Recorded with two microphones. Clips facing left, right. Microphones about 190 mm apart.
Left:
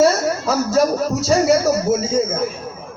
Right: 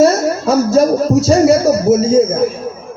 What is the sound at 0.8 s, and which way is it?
Speech, 30° right (ahead or behind).